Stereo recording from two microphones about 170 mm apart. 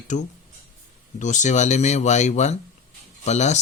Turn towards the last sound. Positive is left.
turn(degrees=40)  # may be behind; listen again after turning